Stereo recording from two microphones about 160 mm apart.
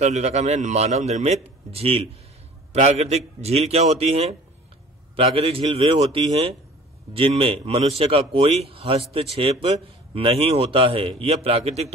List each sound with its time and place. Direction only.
0.0 s a man's voice: 45° right (ahead or behind)